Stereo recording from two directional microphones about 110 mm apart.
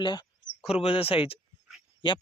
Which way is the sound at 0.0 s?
40° left (ahead or behind).